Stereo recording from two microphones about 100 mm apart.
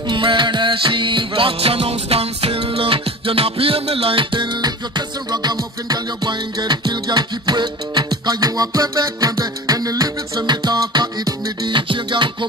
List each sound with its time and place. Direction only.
0.1 s music: 55° right (ahead or behind)